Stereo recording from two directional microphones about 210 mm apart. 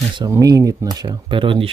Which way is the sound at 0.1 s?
15° right (ahead or behind).